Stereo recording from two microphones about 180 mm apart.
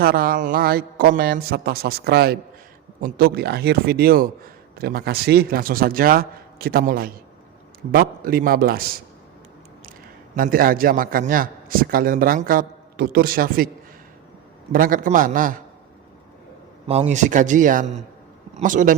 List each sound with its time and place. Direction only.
0.0 s a man's voice: 55° right (ahead or behind)
10.3 s a man's voice: 50° right (ahead or behind)
14.7 s a man's voice: 50° right (ahead or behind)
16.8 s a man's voice: 35° right (ahead or behind)